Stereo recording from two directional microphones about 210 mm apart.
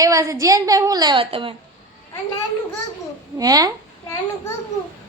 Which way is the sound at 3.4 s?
15° right (ahead or behind).